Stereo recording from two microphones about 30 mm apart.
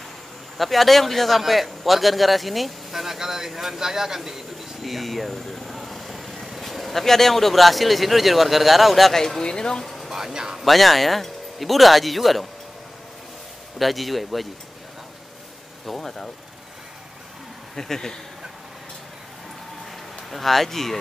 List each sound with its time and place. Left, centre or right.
0.6 s speech: centre
4.8 s a sound: centre
6.6 s speech: centre
9.4 s speech: left
10.1 s speech: centre
10.6 s speech: centre
13.7 s speech: centre
15.9 s speech: centre
17.7 s speech: centre
20.2 s speech: centre